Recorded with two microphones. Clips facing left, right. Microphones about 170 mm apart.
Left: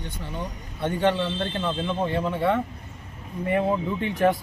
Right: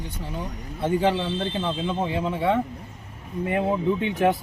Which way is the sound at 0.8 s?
5° right (ahead or behind).